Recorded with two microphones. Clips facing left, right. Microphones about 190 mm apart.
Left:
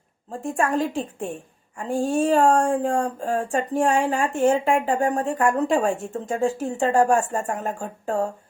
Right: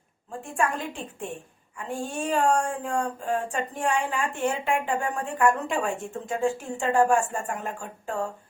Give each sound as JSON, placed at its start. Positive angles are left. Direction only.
{"t": 0.3, "sound": "speech", "side_deg": 40}